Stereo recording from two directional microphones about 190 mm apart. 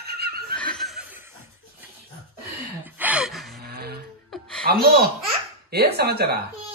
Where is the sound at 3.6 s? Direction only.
55° right (ahead or behind).